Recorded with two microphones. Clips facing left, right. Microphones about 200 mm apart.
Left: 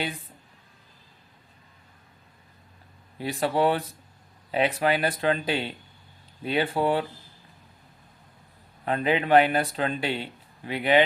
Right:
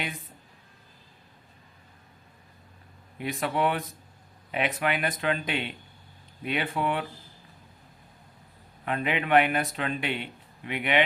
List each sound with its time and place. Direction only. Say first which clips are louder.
3.2 s speech: left 3 dB; 35° left (ahead or behind)
8.8 s speech: left 4 dB; 35° left (ahead or behind)